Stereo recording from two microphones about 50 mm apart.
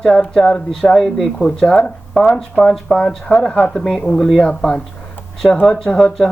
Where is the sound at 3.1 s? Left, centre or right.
Centre.